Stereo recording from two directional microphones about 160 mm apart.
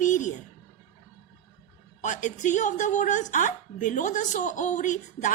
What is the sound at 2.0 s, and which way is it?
A woman's voice, 50° left (ahead or behind).